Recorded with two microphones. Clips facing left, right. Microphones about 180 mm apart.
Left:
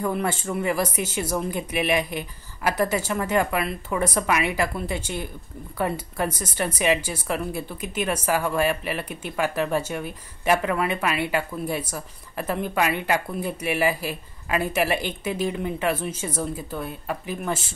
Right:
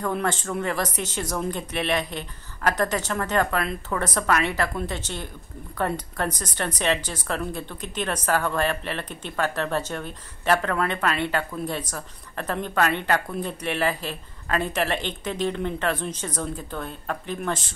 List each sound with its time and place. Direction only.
0.0 s speech: 10° left (ahead or behind)